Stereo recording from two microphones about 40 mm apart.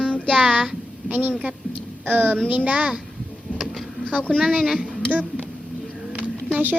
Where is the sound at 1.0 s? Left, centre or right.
Right.